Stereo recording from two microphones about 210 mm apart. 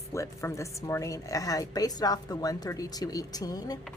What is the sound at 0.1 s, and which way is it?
A woman's voice, 15° left (ahead or behind).